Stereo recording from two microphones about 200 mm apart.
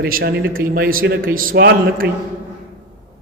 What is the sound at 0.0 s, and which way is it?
A man's voice, 50° right (ahead or behind).